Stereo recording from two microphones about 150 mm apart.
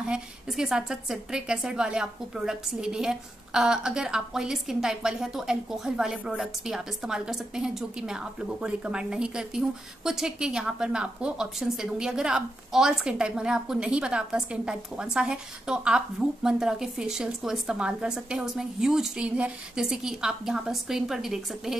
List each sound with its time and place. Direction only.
0.0 s a woman's voice: 5° right (ahead or behind)